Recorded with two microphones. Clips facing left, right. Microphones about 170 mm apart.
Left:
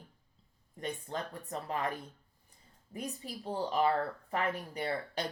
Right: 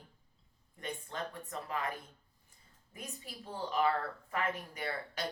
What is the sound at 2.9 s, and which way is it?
Speech, 35° left (ahead or behind).